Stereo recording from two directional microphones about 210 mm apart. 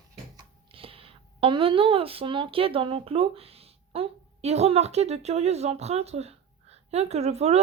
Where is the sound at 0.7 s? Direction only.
25° right (ahead or behind).